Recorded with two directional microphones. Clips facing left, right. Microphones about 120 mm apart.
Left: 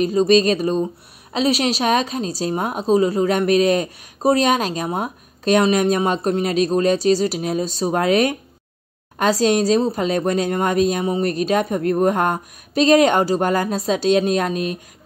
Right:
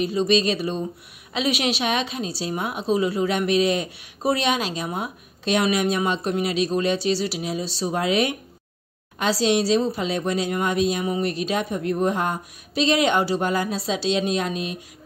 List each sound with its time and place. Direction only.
0.0 s a woman's voice: 45° left (ahead or behind)